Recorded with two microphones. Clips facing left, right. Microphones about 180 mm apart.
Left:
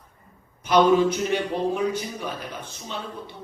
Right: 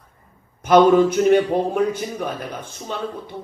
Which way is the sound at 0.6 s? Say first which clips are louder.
Right 5 dB; 50° right (ahead or behind).